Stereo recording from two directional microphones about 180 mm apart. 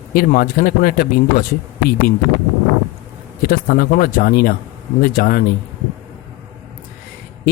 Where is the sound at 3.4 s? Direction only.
55° left (ahead or behind).